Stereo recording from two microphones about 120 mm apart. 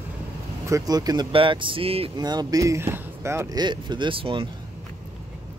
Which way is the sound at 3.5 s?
40° right (ahead or behind).